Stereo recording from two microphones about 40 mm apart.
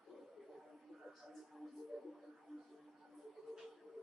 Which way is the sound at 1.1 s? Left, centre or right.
Centre.